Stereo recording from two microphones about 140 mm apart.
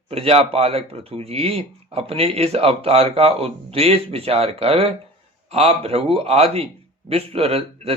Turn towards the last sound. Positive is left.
turn(degrees=-45)  # may be behind; listen again after turning